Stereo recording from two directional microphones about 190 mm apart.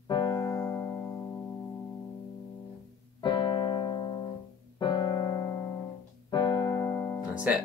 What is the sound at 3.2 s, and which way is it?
Keyboard, 25° left (ahead or behind).